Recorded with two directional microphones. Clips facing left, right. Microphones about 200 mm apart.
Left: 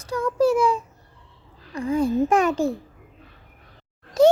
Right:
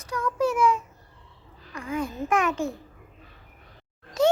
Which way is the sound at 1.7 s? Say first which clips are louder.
Left 9 dB; 30° left (ahead or behind).